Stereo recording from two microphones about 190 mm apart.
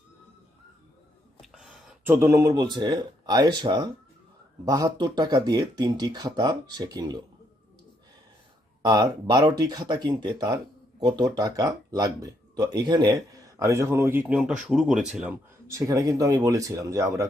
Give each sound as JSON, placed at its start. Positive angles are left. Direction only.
{"t": 1.4, "sound": "speech", "side_deg": -5}
{"t": 8.8, "sound": "speech", "side_deg": -20}
{"t": 15.8, "sound": "speech", "side_deg": -20}